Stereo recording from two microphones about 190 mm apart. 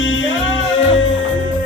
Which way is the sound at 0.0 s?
80° left.